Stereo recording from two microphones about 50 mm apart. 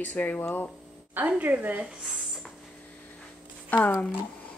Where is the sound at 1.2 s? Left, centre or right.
Right.